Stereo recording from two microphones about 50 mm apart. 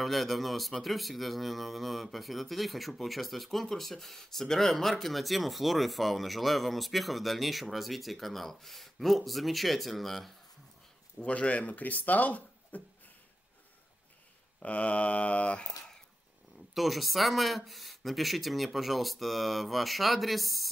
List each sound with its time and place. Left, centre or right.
0.0 s speech: centre
11.1 s speech: left
14.6 s a sound: left
16.7 s speech: centre